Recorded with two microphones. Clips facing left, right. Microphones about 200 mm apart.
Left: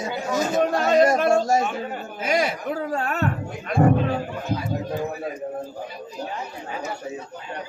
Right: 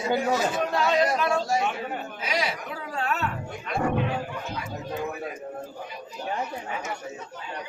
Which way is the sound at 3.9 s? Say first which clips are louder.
Left 3 dB; 35° left (ahead or behind).